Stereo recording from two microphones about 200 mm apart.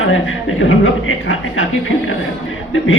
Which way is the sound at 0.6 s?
85° left.